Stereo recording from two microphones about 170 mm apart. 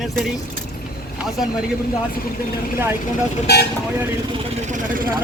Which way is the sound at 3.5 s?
70° left (ahead or behind).